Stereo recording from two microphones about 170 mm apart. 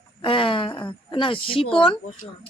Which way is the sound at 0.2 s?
30° left (ahead or behind).